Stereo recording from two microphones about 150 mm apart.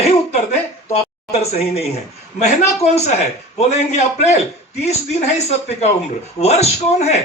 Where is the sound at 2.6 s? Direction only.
45° left (ahead or behind).